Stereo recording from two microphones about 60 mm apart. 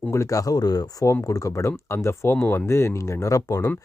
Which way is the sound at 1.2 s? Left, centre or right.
Left.